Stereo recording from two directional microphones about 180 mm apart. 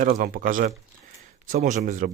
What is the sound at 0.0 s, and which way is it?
Speech, 50° right (ahead or behind).